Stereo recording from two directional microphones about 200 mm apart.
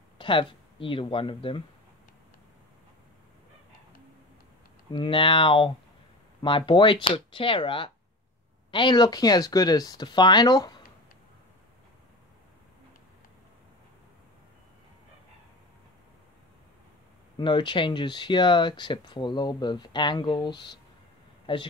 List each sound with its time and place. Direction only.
0.2 s speech: 25° left (ahead or behind)
4.9 s speech: 25° left (ahead or behind)
17.4 s a man's voice: 25° left (ahead or behind)